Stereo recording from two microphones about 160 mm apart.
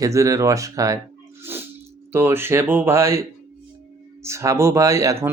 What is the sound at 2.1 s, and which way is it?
Speech, 15° right (ahead or behind).